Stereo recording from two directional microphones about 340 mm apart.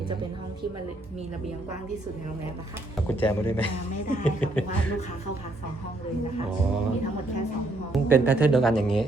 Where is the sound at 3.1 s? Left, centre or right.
Centre.